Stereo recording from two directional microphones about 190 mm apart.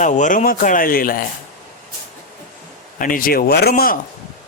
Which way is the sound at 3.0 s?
45° left (ahead or behind).